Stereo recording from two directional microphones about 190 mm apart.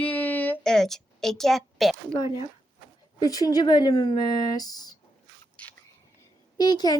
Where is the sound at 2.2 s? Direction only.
20° left (ahead or behind).